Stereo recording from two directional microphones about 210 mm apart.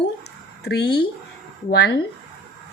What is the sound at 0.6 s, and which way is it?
A woman's voice, 50° left (ahead or behind).